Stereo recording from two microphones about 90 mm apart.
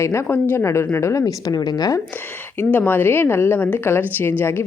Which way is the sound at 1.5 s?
50° left (ahead or behind).